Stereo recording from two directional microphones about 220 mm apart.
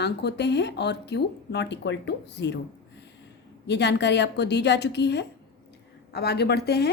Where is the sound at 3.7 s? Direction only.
50° left (ahead or behind).